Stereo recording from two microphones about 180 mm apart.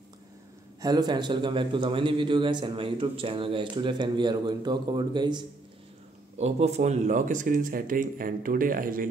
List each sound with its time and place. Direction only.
0.7 s a man's voice: 20° right (ahead or behind)
6.3 s speech: 40° right (ahead or behind)